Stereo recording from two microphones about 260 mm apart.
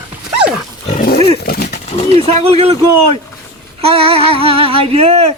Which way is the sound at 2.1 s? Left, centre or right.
Right.